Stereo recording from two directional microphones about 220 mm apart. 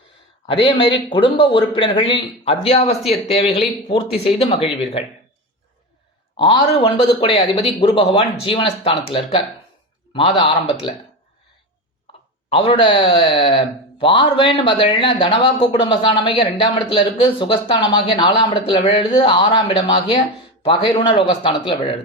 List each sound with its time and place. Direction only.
0.4 s speech: 25° left (ahead or behind)
6.3 s speech: 20° left (ahead or behind)
12.5 s speech: 25° left (ahead or behind)